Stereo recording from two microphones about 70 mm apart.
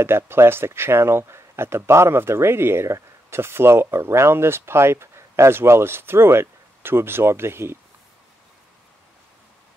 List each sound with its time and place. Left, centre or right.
0.0 s speech: right